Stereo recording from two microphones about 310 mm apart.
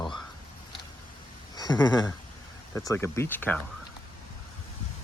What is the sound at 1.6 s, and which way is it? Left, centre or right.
Speech, centre.